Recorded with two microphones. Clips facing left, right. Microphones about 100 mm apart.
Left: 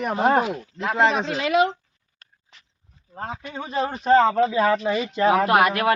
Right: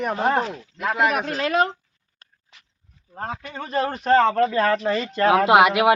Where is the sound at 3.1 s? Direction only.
Centre (ahead or behind).